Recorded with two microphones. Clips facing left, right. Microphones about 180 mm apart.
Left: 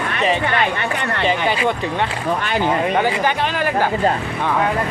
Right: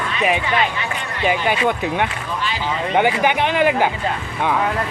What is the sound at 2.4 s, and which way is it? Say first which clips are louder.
Speech: left 5 dB; 55° left (ahead or behind).